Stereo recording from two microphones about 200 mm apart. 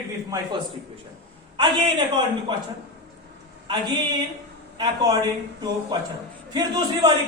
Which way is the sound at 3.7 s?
20° right (ahead or behind).